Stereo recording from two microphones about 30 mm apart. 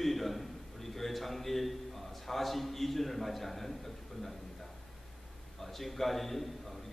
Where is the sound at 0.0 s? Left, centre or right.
Centre.